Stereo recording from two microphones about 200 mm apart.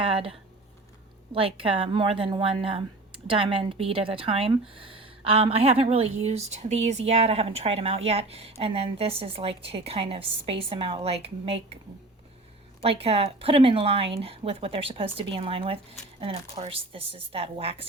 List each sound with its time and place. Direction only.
0.0 s a sound: 30° right (ahead or behind)
1.3 s speech: 25° right (ahead or behind)
12.8 s speech: 30° right (ahead or behind)